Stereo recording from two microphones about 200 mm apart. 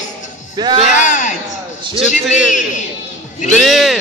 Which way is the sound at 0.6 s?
25° right (ahead or behind).